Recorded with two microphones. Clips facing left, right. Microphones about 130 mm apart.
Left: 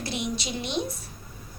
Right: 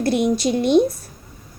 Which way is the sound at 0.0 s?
50° right (ahead or behind).